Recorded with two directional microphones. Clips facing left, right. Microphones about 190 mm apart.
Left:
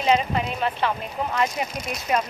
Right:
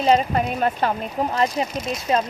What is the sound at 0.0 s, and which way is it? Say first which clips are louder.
Speech: right 3 dB; 40° right (ahead or behind).